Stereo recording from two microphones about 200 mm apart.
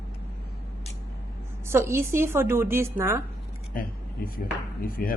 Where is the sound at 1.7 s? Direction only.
10° right (ahead or behind).